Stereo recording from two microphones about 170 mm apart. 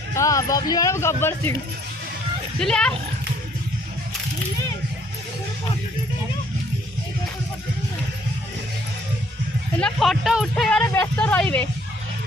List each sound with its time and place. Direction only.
0.1 s a man's voice: 20° left (ahead or behind)
2.6 s speech: 5° left (ahead or behind)
9.8 s speech: centre (ahead or behind)